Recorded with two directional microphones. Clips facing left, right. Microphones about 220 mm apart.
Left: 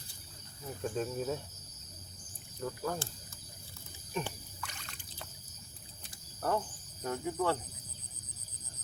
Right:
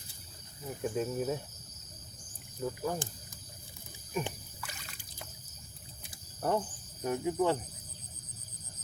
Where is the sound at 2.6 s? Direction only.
15° right (ahead or behind).